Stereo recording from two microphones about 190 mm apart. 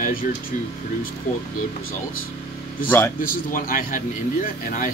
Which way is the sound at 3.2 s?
50° left (ahead or behind).